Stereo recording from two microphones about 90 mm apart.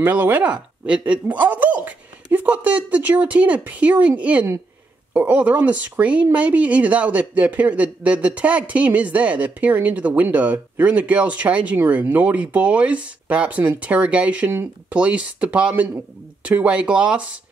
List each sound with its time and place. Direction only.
0.0 s speech: 20° right (ahead or behind)